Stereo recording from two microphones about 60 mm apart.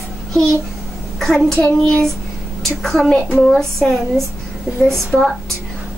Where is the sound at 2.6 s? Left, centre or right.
Centre.